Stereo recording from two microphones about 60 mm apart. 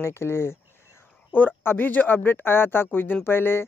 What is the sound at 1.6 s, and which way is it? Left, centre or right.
Speech, left.